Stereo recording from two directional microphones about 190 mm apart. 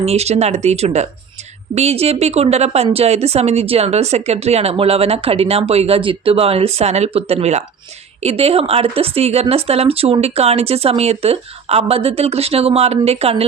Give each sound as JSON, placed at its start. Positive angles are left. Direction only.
{"t": 0.0, "sound": "speech", "side_deg": -35}